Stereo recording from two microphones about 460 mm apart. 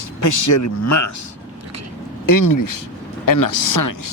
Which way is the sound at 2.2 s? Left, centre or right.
Left.